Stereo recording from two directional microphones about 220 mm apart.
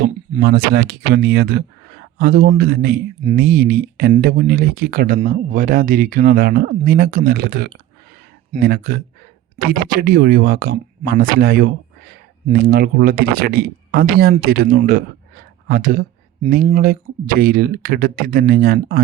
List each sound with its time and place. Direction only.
0.0 s speech: 45° right (ahead or behind)